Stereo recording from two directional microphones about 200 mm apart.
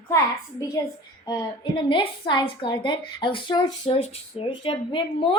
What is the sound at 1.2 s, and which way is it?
A woman's voice, 20° left (ahead or behind).